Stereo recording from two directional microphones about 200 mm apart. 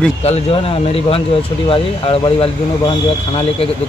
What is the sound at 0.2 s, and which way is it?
Speech, 30° left (ahead or behind).